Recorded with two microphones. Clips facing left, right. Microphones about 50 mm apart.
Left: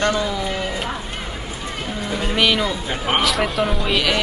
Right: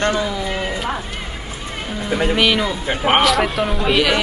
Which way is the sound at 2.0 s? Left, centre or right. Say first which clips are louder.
Right 7 dB; centre.